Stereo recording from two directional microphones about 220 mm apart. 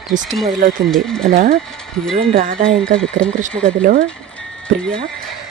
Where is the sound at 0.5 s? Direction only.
40° right (ahead or behind).